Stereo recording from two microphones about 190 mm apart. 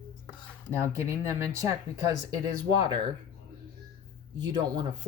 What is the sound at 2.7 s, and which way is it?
Speech, 20° right (ahead or behind).